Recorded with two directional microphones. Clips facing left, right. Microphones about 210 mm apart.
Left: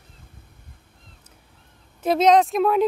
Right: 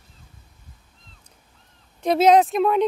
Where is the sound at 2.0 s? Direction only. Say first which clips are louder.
Right 1 dB; centre (ahead or behind).